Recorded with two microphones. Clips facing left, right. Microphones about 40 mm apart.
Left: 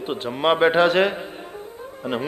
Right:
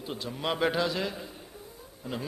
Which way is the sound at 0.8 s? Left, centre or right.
Left.